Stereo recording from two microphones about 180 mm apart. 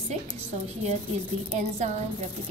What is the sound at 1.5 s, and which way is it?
Speech, 40° right (ahead or behind).